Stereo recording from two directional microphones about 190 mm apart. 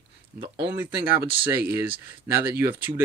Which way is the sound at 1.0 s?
10° right (ahead or behind).